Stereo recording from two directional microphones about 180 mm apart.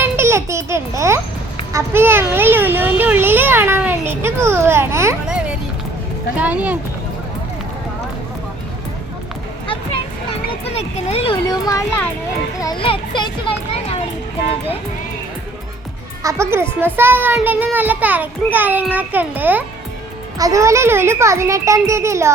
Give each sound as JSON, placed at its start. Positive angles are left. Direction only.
{"t": 0.0, "sound": "a sound", "side_deg": -15}
{"t": 1.7, "sound": "a child's voice", "side_deg": -15}
{"t": 6.4, "sound": "a child's voice", "side_deg": -10}
{"t": 10.7, "sound": "speech", "side_deg": 35}
{"t": 11.4, "sound": "a child's voice", "side_deg": 20}
{"t": 16.2, "sound": "a child's voice", "side_deg": -15}